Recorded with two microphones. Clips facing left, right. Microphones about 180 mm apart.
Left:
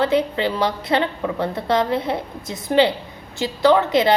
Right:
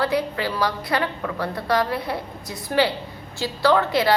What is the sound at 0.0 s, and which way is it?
A woman's voice, 20° left (ahead or behind).